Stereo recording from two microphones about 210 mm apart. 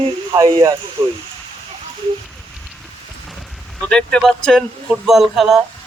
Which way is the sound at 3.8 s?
5° left (ahead or behind).